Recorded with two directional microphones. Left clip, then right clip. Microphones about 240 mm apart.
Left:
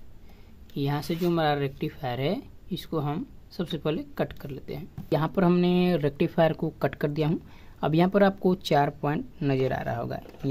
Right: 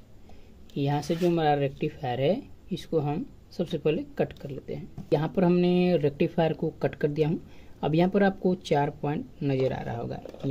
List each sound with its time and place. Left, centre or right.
0.7 s speech: centre